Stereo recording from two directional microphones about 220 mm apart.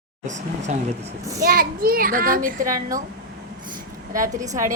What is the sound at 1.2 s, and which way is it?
Speech, 15° right (ahead or behind).